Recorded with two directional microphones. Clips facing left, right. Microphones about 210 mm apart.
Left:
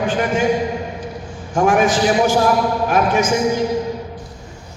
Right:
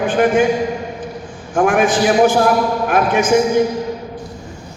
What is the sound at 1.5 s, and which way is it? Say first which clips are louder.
Speech: right 1 dB; 55° right (ahead or behind).